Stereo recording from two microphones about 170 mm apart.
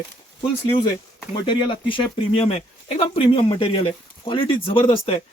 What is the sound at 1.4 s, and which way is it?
Speech, 30° left (ahead or behind).